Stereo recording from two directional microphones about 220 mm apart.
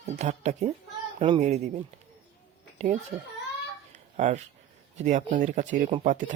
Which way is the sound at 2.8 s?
30° right (ahead or behind).